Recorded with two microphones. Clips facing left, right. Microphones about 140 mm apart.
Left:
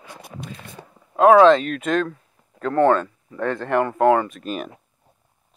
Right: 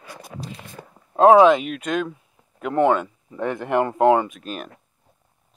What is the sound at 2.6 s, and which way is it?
Speech, 15° right (ahead or behind).